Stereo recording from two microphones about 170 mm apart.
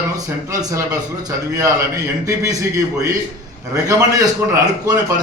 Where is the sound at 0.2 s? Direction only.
20° right (ahead or behind).